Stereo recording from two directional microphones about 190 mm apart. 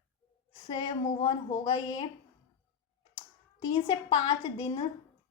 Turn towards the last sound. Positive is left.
turn(degrees=25)  # may be behind; listen again after turning